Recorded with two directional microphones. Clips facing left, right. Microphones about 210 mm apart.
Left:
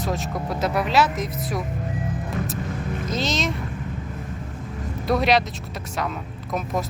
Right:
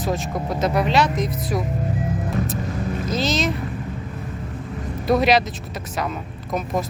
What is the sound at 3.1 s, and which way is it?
Speech, centre (ahead or behind).